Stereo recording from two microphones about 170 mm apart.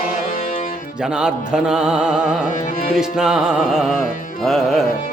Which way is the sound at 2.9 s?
5° right (ahead or behind).